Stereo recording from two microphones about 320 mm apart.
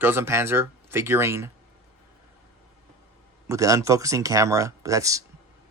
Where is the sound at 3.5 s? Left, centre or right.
Centre.